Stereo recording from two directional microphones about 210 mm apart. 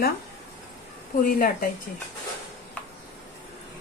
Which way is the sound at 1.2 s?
40° left (ahead or behind).